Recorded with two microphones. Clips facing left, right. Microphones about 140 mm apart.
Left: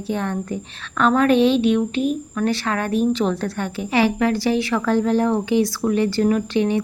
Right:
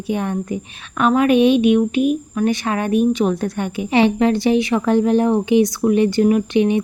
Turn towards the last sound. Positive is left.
turn(degrees=-20)  # may be behind; listen again after turning